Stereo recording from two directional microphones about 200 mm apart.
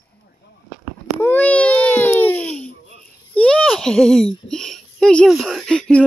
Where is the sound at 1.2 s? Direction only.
10° left (ahead or behind).